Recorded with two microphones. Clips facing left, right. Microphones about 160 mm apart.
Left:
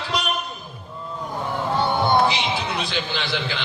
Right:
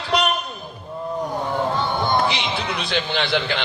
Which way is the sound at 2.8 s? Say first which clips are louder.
Right 4 dB; 60° right (ahead or behind).